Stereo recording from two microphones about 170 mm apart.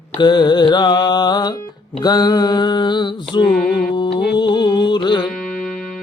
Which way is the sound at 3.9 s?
25° left (ahead or behind).